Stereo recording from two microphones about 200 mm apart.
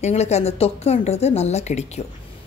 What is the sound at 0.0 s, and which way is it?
A woman's voice, 35° left (ahead or behind).